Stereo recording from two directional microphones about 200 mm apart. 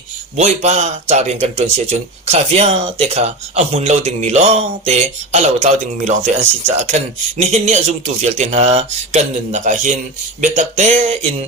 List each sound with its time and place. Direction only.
0.3 s speech: 35° right (ahead or behind)